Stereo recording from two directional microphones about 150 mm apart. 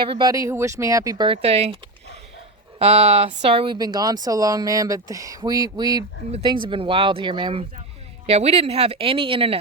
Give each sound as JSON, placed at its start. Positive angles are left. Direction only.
{"t": 0.0, "sound": "speech", "side_deg": -35}
{"t": 1.3, "sound": "speech", "side_deg": -45}